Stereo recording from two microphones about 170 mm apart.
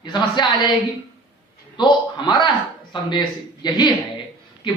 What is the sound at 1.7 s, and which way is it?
A man's voice, 25° left (ahead or behind).